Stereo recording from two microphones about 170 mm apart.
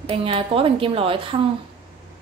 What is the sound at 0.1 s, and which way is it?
Speech, 35° right (ahead or behind).